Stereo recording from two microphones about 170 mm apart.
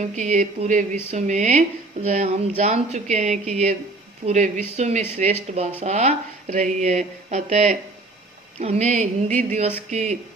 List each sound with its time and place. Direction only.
0.0 s speech: 45° right (ahead or behind)